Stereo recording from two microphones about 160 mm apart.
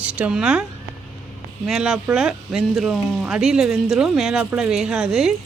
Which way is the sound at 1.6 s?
Centre (ahead or behind).